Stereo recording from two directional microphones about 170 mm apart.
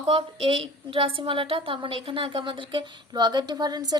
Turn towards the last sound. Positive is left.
turn(degrees=-25)  # may be behind; listen again after turning